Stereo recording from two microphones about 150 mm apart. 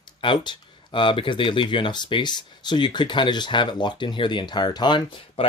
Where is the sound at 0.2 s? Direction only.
30° left (ahead or behind).